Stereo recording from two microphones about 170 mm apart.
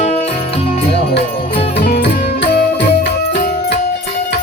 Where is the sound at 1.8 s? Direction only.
75° left (ahead or behind).